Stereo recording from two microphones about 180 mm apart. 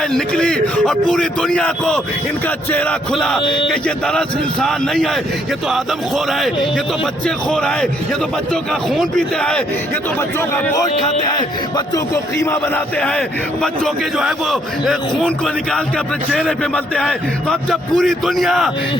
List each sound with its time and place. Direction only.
0.1 s a man's voice: 5° left (ahead or behind)
3.4 s speech: 25° left (ahead or behind)
3.7 s a man's voice: 5° left (ahead or behind)
8.9 s a man's voice: centre (ahead or behind)
12.1 s a man's voice: 15° left (ahead or behind)
16.3 s a man's voice: 5° left (ahead or behind)